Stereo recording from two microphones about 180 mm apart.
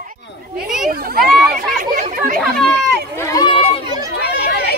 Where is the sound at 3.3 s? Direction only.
25° left (ahead or behind).